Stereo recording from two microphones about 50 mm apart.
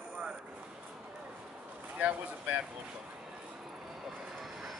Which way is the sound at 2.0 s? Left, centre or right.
Right.